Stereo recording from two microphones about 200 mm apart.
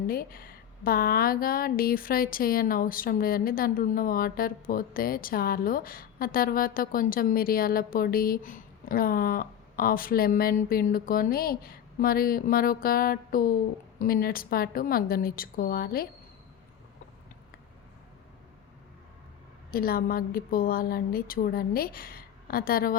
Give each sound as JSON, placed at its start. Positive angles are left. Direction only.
{"t": 0.1, "sound": "speech", "side_deg": 45}
{"t": 19.7, "sound": "speech", "side_deg": 50}